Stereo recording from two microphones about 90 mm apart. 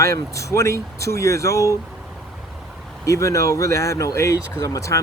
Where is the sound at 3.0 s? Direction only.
35° left (ahead or behind).